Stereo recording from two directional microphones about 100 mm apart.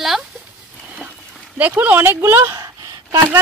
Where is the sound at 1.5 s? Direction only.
15° right (ahead or behind).